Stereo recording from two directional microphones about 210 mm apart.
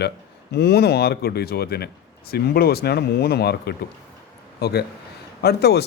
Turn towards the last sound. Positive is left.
turn(degrees=50)  # may be behind; listen again after turning